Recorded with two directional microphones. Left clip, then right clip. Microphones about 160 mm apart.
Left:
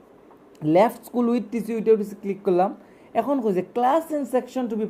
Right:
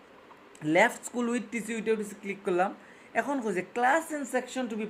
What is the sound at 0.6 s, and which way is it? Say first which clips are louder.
A woman's voice: left 6 dB; 25° left (ahead or behind).